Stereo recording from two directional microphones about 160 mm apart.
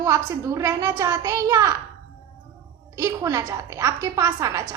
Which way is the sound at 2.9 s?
20° right (ahead or behind).